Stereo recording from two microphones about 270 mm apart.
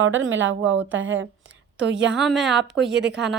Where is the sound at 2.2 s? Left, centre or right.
Centre.